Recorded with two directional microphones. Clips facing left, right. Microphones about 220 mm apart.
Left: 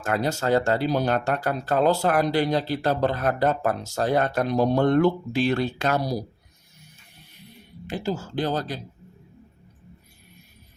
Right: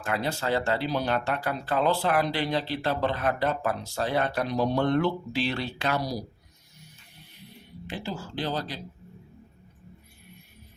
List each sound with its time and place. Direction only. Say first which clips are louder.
0.0 s speech: left 4 dB; 45° left (ahead or behind)
7.9 s speech: left 6 dB; 45° left (ahead or behind)